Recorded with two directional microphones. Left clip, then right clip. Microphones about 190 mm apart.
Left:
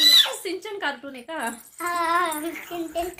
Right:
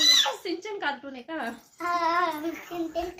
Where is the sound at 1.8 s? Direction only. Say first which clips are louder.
Left 2 dB; 10° left (ahead or behind).